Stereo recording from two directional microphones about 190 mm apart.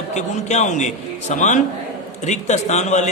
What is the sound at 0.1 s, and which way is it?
Speech, 35° left (ahead or behind).